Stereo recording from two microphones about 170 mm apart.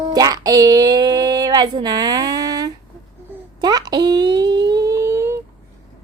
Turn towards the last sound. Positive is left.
turn(degrees=-15)  # may be behind; listen again after turning